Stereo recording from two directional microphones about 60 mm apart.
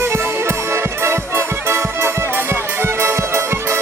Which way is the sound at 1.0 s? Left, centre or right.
Right.